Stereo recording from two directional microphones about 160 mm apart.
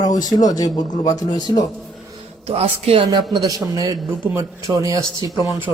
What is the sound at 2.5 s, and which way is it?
Speech, 35° right (ahead or behind).